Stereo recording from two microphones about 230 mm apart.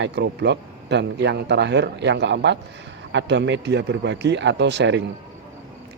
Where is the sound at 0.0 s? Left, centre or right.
Right.